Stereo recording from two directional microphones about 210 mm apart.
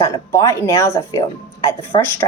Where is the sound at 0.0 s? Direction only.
15° left (ahead or behind).